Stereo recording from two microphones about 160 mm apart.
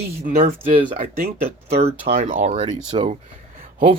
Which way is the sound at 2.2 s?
60° right (ahead or behind).